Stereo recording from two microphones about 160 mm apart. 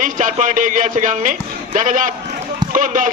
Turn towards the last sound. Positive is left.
turn(degrees=-55)  # may be behind; listen again after turning